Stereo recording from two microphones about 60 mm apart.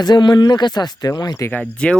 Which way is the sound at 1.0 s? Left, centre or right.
Left.